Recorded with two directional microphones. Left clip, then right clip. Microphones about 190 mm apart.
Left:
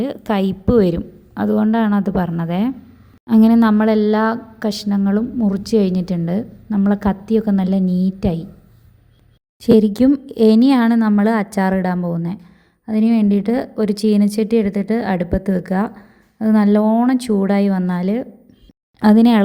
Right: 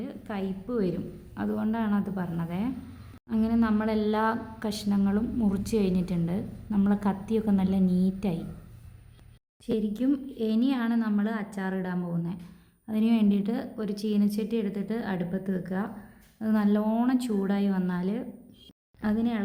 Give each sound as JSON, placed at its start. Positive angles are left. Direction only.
{"t": 0.0, "sound": "speech", "side_deg": 50}
{"t": 7.9, "sound": "a woman's voice", "side_deg": 90}
{"t": 9.6, "sound": "a woman's voice", "side_deg": 50}
{"t": 18.9, "sound": "a woman's voice", "side_deg": 50}